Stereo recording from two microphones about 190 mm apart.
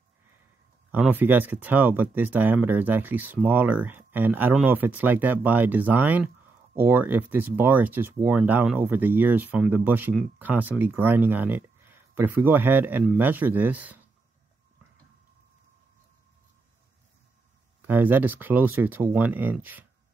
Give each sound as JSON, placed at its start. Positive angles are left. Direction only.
{"t": 0.9, "sound": "speech", "side_deg": -10}
{"t": 17.8, "sound": "speech", "side_deg": -10}